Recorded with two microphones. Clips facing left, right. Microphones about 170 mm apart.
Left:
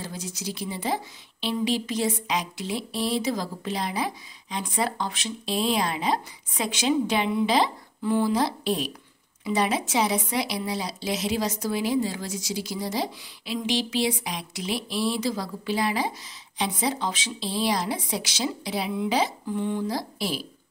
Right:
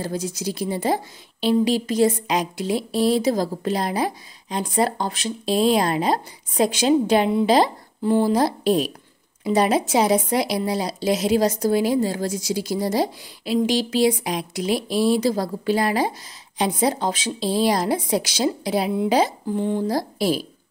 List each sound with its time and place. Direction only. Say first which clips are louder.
0.0 s a woman's voice: right 8 dB; 45° right (ahead or behind)